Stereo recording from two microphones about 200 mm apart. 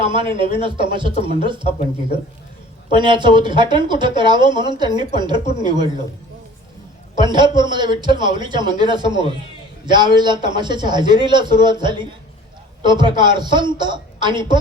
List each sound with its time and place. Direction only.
0.0 s speech: 25° right (ahead or behind)
2.9 s speech: 25° right (ahead or behind)
7.2 s speech: 20° right (ahead or behind)